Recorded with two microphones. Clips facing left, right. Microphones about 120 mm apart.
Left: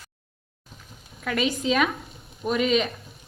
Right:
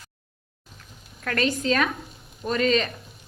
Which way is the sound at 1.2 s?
5° left (ahead or behind).